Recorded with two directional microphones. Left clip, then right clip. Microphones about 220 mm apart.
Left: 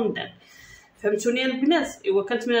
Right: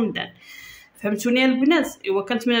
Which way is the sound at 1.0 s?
50° right (ahead or behind).